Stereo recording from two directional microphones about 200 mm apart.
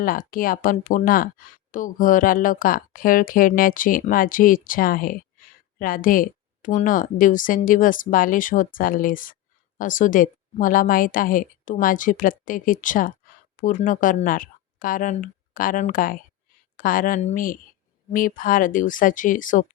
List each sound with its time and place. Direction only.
0.0 s a woman's voice: 45° left (ahead or behind)